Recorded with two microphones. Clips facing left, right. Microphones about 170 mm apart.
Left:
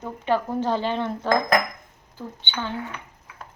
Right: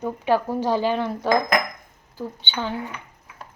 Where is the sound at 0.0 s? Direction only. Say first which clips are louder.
Right 3 dB; 10° right (ahead or behind).